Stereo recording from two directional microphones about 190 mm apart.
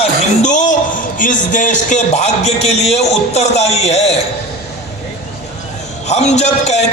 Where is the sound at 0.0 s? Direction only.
40° left (ahead or behind).